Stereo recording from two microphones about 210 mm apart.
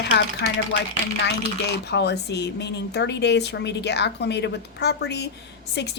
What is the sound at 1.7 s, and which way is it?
Speech, 55° left (ahead or behind).